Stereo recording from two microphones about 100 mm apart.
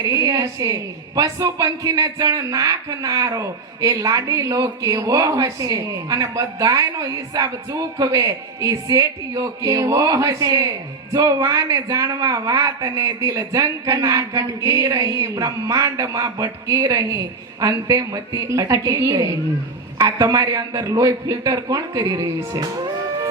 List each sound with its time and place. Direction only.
0.0 s a woman's voice: 35° right (ahead or behind)